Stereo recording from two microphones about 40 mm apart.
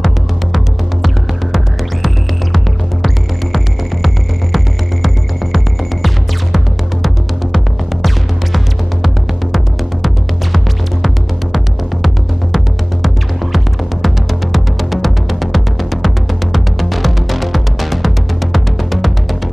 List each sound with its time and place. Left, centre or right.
2.0 s music: centre
8.5 s music: centre
14.0 s music: centre